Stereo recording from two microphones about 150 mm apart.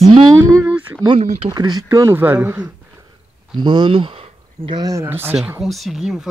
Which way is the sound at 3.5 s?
30° right (ahead or behind).